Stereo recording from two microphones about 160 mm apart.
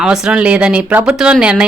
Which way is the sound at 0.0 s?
5° right (ahead or behind).